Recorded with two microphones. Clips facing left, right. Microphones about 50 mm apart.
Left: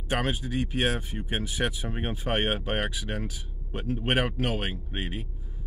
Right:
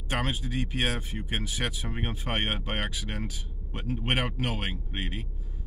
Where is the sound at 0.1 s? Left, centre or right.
Centre.